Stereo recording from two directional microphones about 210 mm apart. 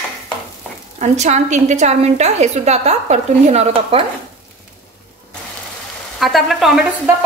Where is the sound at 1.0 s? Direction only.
35° right (ahead or behind).